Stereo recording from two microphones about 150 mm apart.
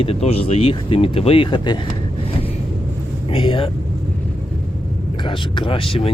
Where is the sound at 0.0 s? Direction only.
40° left (ahead or behind).